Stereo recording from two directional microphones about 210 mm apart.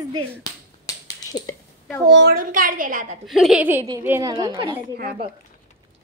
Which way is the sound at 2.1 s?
50° right (ahead or behind).